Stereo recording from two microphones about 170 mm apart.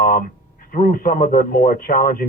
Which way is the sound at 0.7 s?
55° left (ahead or behind).